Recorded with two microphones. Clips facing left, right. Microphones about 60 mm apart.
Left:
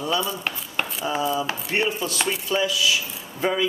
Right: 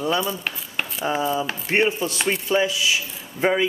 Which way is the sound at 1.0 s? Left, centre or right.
Right.